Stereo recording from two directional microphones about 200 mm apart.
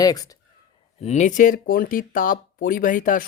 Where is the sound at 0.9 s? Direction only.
35° left (ahead or behind).